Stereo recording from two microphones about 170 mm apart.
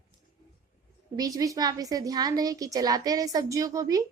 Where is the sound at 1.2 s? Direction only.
20° right (ahead or behind).